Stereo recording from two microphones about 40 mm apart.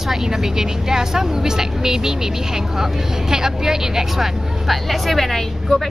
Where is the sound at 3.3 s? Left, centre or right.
Centre.